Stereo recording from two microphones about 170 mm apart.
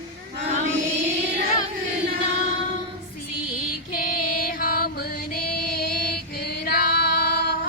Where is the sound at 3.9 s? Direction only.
55° left (ahead or behind).